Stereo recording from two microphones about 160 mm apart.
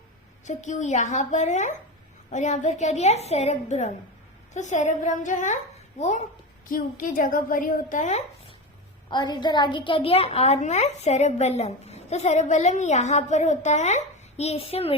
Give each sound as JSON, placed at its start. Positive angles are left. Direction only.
{"t": 0.4, "sound": "a woman's voice", "side_deg": 50}
{"t": 6.7, "sound": "a woman's voice", "side_deg": 60}
{"t": 9.0, "sound": "a woman's voice", "side_deg": 25}